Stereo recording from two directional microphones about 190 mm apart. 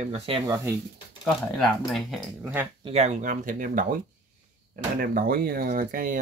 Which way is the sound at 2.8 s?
35° right (ahead or behind).